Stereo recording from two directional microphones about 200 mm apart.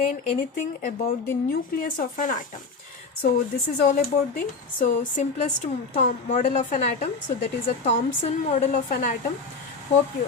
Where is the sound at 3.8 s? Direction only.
45° left (ahead or behind).